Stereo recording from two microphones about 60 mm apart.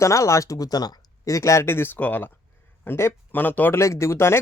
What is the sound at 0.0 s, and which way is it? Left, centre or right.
Speech, left.